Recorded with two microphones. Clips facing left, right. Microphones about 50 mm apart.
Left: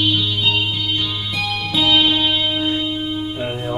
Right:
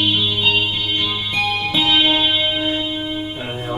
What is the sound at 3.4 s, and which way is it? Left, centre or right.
Music, centre.